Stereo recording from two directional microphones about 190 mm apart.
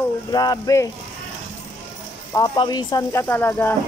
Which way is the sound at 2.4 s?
20° left (ahead or behind).